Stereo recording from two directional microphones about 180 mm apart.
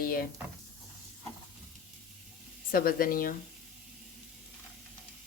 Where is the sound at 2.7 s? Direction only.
55° left (ahead or behind).